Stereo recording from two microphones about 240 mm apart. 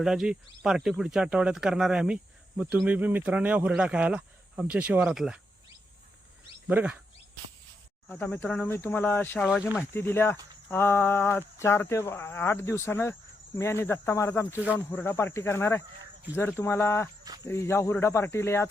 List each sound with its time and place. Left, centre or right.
0.0 s speech: centre
6.7 s speech: centre
8.0 s insect: centre